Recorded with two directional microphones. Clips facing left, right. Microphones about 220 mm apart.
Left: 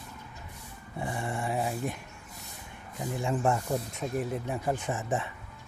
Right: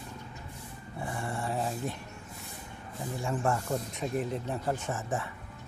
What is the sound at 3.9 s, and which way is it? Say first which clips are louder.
Speech: even; centre (ahead or behind).